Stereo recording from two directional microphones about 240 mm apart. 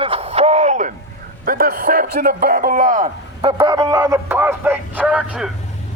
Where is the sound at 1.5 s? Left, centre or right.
Right.